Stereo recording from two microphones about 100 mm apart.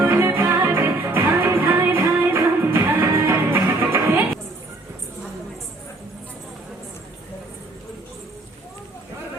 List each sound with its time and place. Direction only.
0.0 s music: 25° right (ahead or behind)